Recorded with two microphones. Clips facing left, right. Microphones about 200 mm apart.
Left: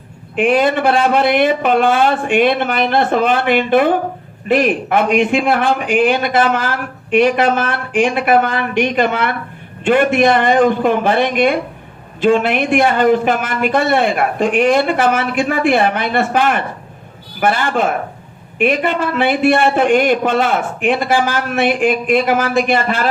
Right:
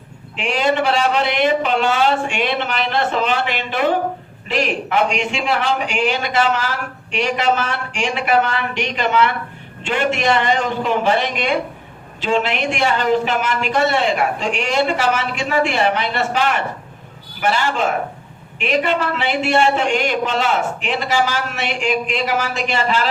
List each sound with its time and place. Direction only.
0.3 s a man's voice: 55° left (ahead or behind)